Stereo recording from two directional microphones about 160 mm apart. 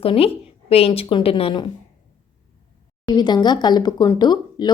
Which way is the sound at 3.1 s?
25° left (ahead or behind).